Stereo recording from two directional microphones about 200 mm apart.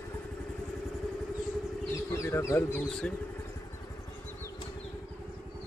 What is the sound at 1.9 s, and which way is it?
Speech, 15° left (ahead or behind).